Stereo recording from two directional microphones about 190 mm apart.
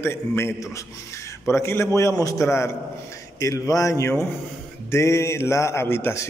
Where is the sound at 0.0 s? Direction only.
15° left (ahead or behind).